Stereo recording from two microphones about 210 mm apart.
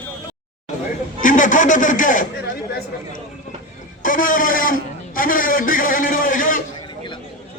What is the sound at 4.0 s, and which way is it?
A man's voice, 40° left (ahead or behind).